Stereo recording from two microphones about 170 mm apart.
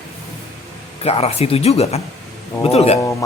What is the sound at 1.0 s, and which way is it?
Speech, 35° left (ahead or behind).